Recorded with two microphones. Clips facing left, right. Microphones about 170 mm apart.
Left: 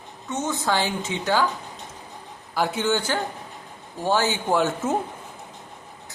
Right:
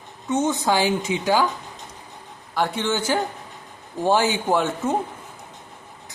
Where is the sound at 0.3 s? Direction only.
15° right (ahead or behind).